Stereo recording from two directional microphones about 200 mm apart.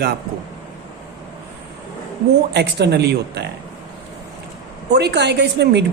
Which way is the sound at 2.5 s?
55° right (ahead or behind).